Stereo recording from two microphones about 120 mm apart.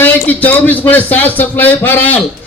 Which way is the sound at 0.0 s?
15° left (ahead or behind).